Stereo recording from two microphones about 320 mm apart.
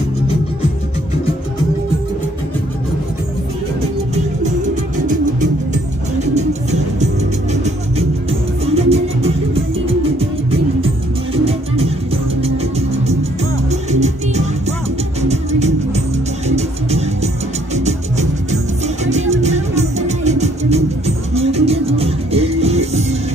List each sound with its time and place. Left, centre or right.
6.1 s music: right
8.3 s music: centre
11.4 s music: centre
13.7 s music: right